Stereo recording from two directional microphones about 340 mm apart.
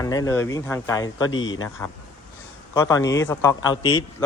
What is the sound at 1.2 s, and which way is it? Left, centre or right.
Speech, left.